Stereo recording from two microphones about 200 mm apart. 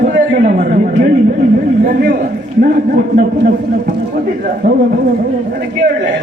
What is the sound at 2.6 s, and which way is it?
Speech, 45° right (ahead or behind).